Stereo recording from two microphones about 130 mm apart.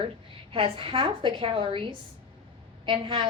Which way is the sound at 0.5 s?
45° right (ahead or behind).